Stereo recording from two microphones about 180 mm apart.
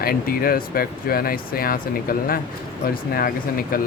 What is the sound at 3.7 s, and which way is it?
Speech, 50° left (ahead or behind).